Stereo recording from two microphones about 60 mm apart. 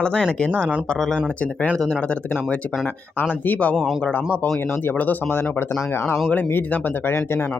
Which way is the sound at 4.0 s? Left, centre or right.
Left.